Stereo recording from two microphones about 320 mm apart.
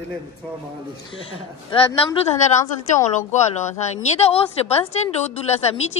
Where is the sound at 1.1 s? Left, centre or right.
Centre.